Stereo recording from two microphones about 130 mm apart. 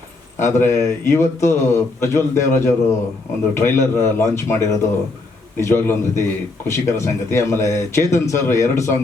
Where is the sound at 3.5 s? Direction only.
20° left (ahead or behind).